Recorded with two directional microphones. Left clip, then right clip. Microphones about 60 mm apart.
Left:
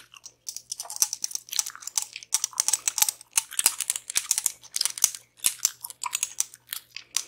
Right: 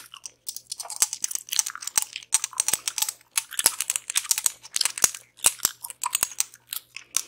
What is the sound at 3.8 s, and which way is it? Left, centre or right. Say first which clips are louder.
Crumpling: right 2 dB; right.